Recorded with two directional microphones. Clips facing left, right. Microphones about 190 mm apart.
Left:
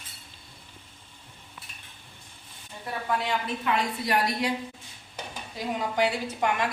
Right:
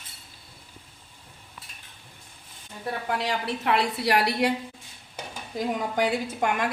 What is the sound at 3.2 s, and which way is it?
A woman's voice, 75° right (ahead or behind).